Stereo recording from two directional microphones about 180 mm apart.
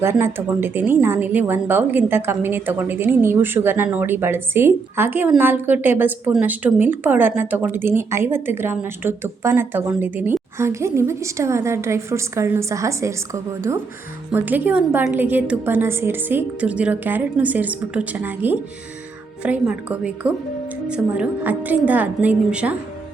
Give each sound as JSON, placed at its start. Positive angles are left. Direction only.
{"t": 0.0, "sound": "speech", "side_deg": -15}